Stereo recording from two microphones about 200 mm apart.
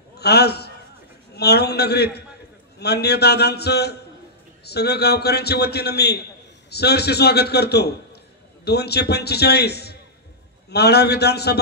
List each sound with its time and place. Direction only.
0.2 s a man's voice: 55° left (ahead or behind)